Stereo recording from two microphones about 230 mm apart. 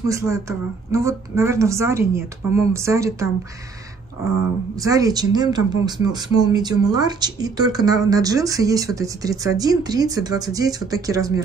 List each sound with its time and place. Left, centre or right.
0.1 s speech: centre
4.8 s speech: centre